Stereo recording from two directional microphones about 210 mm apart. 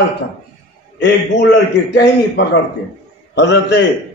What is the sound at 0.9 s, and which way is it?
Speech, 55° left (ahead or behind).